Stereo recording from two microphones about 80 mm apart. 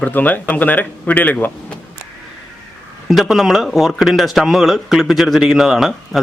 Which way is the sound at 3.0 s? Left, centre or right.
Centre.